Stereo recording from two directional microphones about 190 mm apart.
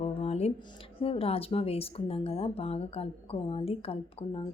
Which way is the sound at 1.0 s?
30° left (ahead or behind).